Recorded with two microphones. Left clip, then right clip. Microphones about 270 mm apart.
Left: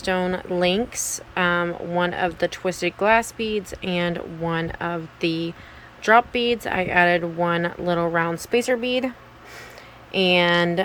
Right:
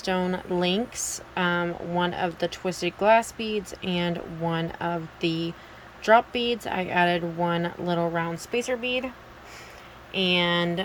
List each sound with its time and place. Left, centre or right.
0.0 s speech: centre
10.1 s speech: centre